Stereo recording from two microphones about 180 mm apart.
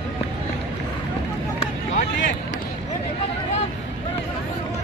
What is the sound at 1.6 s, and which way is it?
Vehicle, 45° left (ahead or behind).